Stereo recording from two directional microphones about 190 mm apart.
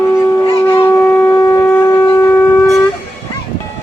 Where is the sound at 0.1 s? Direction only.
15° left (ahead or behind).